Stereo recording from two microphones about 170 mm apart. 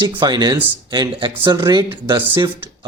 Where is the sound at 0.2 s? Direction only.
25° right (ahead or behind).